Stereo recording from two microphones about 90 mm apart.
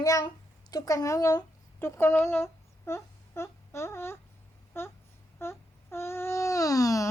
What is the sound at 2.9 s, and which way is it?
Wail, 30° left (ahead or behind).